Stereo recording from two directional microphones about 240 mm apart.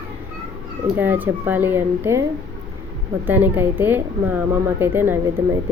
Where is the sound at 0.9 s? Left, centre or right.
Centre.